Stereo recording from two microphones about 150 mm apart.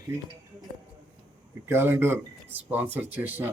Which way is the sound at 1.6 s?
15° right (ahead or behind).